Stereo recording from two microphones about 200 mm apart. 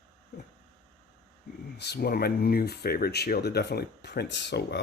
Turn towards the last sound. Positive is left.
turn(degrees=60)  # may be behind; listen again after turning